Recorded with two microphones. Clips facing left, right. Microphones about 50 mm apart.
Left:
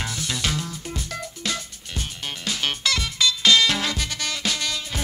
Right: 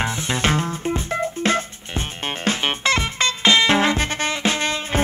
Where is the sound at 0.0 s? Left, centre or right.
Right.